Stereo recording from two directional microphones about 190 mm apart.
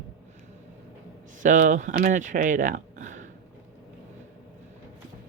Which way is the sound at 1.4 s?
40° right (ahead or behind).